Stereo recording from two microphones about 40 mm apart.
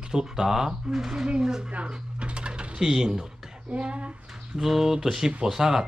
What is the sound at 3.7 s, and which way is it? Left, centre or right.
Speech, right.